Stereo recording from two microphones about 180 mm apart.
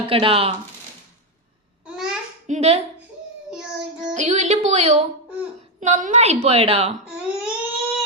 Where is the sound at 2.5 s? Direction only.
35° right (ahead or behind).